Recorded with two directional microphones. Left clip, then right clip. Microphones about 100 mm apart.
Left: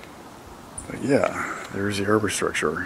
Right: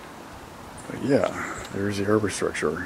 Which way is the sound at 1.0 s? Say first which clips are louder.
Left 1 dB; 15° left (ahead or behind).